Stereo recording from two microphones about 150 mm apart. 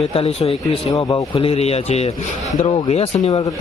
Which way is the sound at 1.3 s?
40° left (ahead or behind).